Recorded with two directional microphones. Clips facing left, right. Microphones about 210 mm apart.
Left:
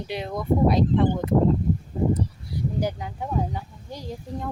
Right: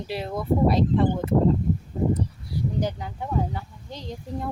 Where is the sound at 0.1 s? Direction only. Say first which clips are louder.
Even; 5° right (ahead or behind).